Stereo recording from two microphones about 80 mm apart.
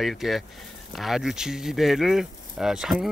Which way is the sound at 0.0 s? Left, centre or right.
Centre.